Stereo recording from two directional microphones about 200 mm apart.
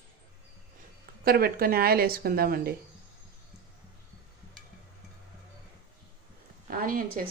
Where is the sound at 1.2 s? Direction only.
50° right (ahead or behind).